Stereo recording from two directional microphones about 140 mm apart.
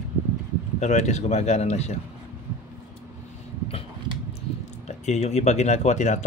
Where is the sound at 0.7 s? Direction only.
55° left (ahead or behind).